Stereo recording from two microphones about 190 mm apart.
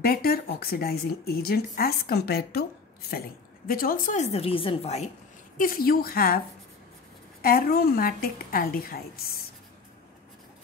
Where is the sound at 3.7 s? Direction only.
50° left (ahead or behind); by 5.1 s 35° left (ahead or behind).